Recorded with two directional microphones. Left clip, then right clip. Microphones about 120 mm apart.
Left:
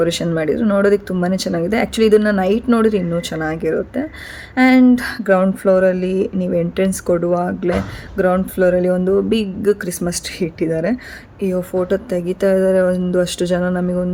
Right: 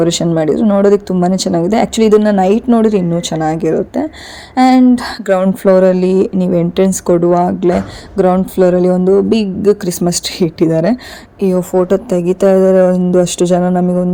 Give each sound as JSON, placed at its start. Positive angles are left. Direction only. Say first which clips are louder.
{"t": 0.0, "sound": "speech", "louder": "right 5 dB", "side_deg": -30}
{"t": 9.8, "sound": "speech", "louder": "right 7 dB", "side_deg": -40}